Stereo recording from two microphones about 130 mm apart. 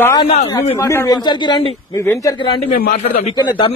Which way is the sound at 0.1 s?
40° left (ahead or behind).